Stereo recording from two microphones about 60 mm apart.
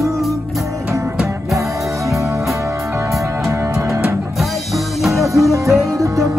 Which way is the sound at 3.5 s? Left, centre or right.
Right.